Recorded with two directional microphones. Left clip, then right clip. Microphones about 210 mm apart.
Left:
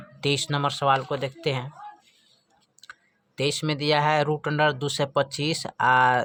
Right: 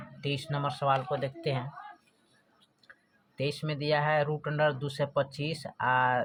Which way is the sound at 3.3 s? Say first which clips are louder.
Left 8 dB; 35° left (ahead or behind).